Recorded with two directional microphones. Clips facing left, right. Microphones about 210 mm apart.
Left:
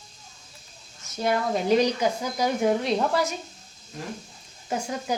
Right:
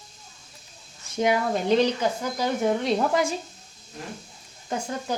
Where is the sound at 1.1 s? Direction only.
15° right (ahead or behind).